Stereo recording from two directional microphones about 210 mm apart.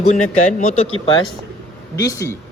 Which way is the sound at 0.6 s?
40° left (ahead or behind).